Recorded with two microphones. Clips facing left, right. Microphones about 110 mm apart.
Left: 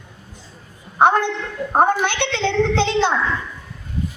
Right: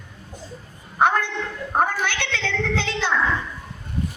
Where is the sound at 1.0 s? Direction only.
20° left (ahead or behind).